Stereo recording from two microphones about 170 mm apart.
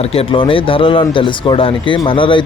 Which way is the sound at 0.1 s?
35° left (ahead or behind).